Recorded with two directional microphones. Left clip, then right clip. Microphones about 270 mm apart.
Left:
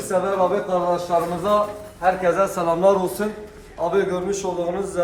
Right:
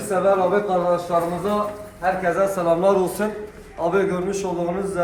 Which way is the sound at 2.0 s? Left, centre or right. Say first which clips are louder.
Left 2 dB; centre.